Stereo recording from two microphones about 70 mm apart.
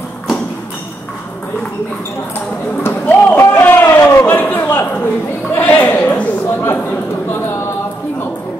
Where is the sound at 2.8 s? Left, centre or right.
Left.